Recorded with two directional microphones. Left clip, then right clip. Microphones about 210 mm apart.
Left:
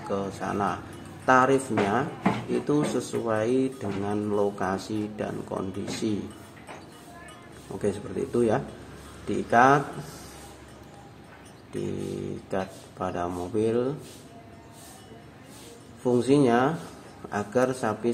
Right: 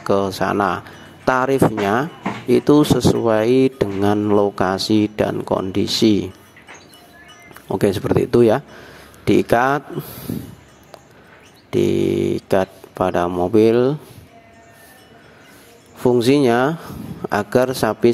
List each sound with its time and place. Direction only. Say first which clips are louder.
0.1 s speech: right 12 dB; 45° right (ahead or behind)
7.8 s speech: right 12 dB; 45° right (ahead or behind)
11.7 s speech: right 16 dB; 45° right (ahead or behind)
16.0 s speech: right 7 dB; 50° right (ahead or behind)